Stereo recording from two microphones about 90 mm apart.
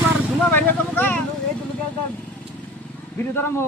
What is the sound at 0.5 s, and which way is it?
Speech, 20° left (ahead or behind).